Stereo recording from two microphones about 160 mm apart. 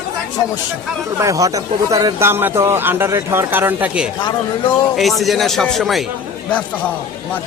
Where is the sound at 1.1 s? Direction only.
20° right (ahead or behind); by 6.0 s centre (ahead or behind).